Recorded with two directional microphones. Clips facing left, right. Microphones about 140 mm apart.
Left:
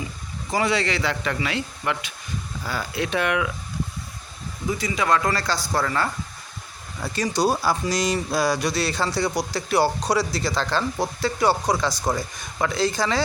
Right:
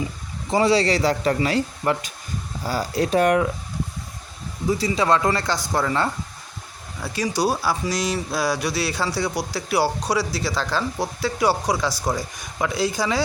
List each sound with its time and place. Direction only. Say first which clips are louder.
0.5 s speech: right 5 dB; 30° right (ahead or behind)
4.7 s speech: right 3 dB; 30° right (ahead or behind)
7.0 s speech: even; 5° right (ahead or behind)